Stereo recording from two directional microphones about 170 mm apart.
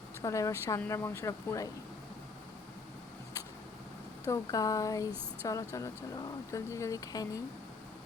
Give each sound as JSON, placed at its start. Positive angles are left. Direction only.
{"t": 0.2, "sound": "speech", "side_deg": 20}
{"t": 4.3, "sound": "speech", "side_deg": 20}